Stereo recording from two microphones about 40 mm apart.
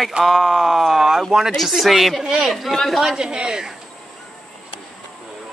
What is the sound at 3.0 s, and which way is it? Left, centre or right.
Speech, centre.